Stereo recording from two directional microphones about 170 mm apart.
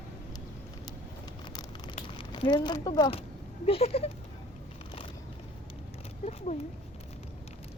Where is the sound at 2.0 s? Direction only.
30° left (ahead or behind).